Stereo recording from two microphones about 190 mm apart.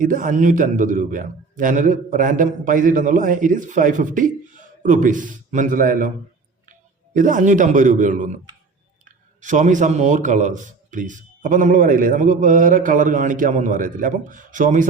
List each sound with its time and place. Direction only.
0.0 s a man's voice: 45° right (ahead or behind)
9.4 s a man's voice: 40° right (ahead or behind)